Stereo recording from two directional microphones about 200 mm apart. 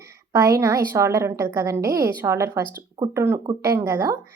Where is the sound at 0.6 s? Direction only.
15° right (ahead or behind).